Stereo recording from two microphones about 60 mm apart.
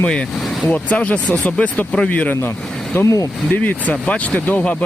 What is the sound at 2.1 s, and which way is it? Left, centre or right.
Speech, left.